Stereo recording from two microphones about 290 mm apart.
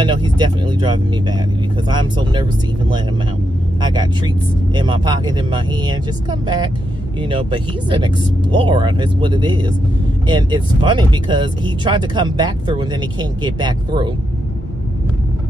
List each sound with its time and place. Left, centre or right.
0.0 s speech: centre
3.8 s speech: centre